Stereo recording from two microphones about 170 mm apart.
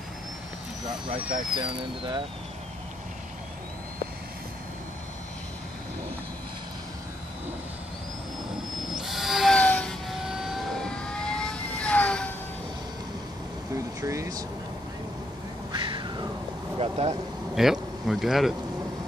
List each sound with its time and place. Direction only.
1.6 s speech: 30° right (ahead or behind)
8.9 s vehicle: centre (ahead or behind)
13.7 s air conditioning: 15° right (ahead or behind)
15.7 s a sound: 30° right (ahead or behind)
17.6 s a man's voice: centre (ahead or behind)